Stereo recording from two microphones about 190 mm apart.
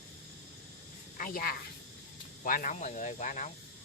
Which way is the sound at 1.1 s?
45° left (ahead or behind).